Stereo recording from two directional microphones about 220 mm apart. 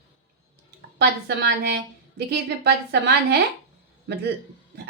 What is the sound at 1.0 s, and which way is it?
A woman's voice, 50° right (ahead or behind).